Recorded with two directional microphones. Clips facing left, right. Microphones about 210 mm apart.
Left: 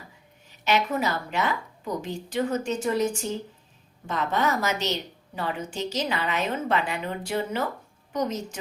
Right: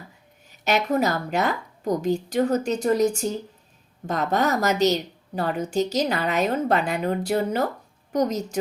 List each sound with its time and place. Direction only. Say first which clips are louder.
0.6 s a woman's voice: right 3 dB; 40° right (ahead or behind)